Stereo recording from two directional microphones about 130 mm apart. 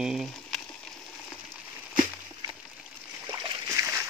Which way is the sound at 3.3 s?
20° right (ahead or behind).